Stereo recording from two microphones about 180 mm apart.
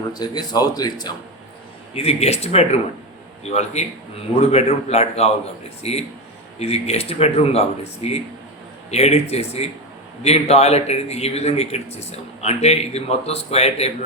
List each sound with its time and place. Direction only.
0.1 s speech: 25° left (ahead or behind)
2.0 s a man's voice: 35° left (ahead or behind)